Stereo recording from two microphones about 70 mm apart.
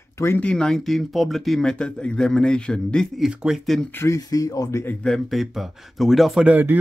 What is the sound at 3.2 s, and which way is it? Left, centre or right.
Speech, centre.